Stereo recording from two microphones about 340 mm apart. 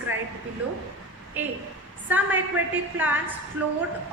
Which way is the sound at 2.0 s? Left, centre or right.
Centre.